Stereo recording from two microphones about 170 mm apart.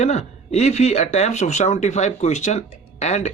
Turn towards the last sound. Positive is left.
turn(degrees=40)  # may be behind; listen again after turning